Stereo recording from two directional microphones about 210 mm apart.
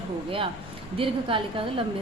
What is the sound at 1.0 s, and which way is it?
Speech, 25° right (ahead or behind).